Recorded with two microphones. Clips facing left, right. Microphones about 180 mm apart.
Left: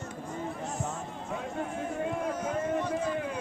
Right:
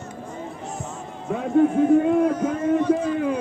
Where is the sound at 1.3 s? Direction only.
75° right (ahead or behind).